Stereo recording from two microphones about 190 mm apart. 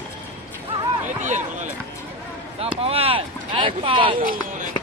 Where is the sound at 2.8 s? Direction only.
30° right (ahead or behind).